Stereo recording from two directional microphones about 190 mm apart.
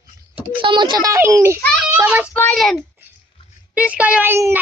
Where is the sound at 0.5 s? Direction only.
25° right (ahead or behind).